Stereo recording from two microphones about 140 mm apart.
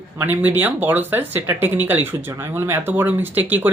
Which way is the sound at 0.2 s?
15° right (ahead or behind).